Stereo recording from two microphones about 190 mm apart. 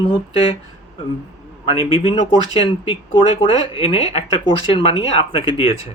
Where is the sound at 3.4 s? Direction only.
30° left (ahead or behind).